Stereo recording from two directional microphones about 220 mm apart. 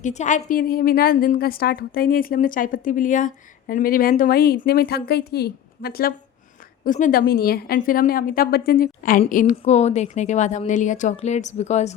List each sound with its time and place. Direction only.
0.0 s a woman's voice: 35° left (ahead or behind)